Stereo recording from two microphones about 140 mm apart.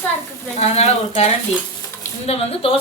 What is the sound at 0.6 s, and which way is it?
A woman's voice, 50° left (ahead or behind).